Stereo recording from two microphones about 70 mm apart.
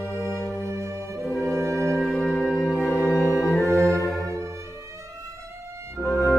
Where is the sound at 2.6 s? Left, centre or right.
Left.